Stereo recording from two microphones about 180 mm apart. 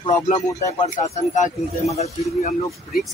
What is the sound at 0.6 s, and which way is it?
Speech, 40° left (ahead or behind).